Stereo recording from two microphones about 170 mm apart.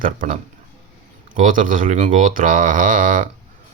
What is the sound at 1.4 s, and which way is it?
Speech, 50° right (ahead or behind).